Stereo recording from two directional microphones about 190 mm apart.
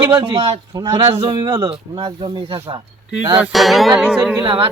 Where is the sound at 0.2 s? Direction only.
30° right (ahead or behind).